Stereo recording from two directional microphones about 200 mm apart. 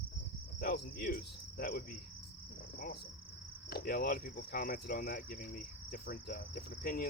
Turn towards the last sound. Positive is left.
turn(degrees=45)  # may be behind; listen again after turning